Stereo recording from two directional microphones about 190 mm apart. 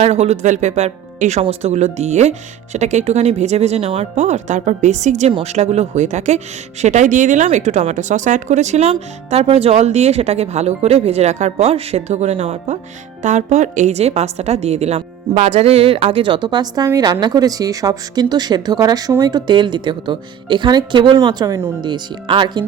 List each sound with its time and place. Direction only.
0.0 s a woman's voice: 35° right (ahead or behind)